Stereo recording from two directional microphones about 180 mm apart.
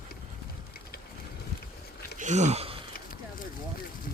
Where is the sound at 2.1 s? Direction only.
40° right (ahead or behind).